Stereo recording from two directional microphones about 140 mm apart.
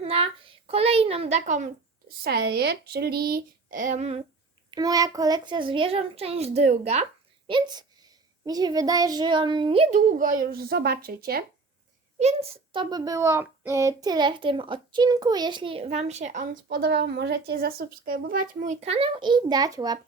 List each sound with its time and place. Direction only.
0.0 s a child's voice: 45° right (ahead or behind); by 1.7 s 60° right (ahead or behind)
3.1 s speech: 90° right; by 4.2 s 55° right (ahead or behind)
4.7 s a child's voice: 25° right (ahead or behind); by 7.0 s 50° right (ahead or behind)
7.4 s a child's voice: 35° right (ahead or behind)
9.9 s a child's voice: 70° right (ahead or behind); by 11.4 s 90° right
12.2 s a child's voice: 40° right (ahead or behind); by 16.9 s 80° right
17.7 s a child's voice: 90° right; by 20.0 s 25° right (ahead or behind)